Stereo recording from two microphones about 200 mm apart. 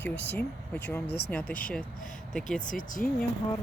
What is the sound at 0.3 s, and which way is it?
Speech, 10° left (ahead or behind).